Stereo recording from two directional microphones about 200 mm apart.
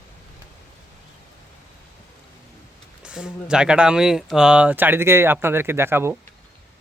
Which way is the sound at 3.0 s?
5° right (ahead or behind).